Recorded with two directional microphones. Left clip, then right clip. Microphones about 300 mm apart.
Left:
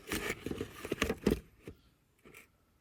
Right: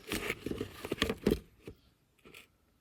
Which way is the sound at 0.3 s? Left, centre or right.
Centre.